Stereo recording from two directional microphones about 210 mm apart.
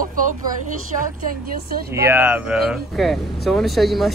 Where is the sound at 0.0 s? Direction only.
40° right (ahead or behind).